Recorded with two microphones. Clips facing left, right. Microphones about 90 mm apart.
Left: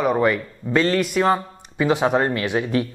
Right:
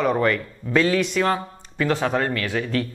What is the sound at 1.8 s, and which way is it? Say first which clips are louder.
Speech: left 3 dB; 15° left (ahead or behind).